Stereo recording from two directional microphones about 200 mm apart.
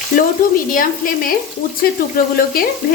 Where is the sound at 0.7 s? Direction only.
45° left (ahead or behind).